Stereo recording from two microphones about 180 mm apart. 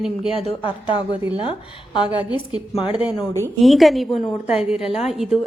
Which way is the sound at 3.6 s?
Centre (ahead or behind).